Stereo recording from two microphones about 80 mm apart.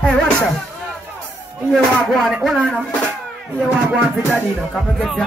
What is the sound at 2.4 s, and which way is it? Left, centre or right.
Speech, centre.